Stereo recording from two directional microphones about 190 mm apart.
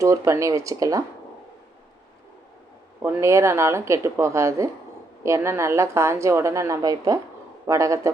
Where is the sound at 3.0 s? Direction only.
15° right (ahead or behind).